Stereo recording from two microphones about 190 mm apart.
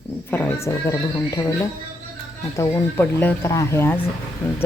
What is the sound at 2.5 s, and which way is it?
A woman's voice, 15° left (ahead or behind).